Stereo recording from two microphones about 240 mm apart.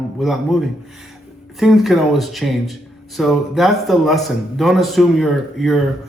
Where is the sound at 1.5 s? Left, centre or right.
Centre.